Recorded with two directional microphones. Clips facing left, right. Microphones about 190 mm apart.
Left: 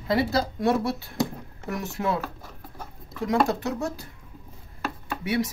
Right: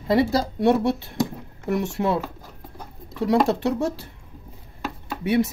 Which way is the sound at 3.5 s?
30° right (ahead or behind).